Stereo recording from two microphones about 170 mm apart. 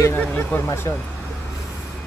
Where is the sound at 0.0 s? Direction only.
15° left (ahead or behind).